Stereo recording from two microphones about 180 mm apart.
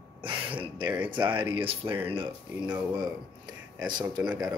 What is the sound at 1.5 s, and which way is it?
Speech, 30° right (ahead or behind).